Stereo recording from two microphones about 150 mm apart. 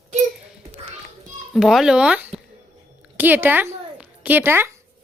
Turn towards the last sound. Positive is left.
turn(degrees=-15)  # may be behind; listen again after turning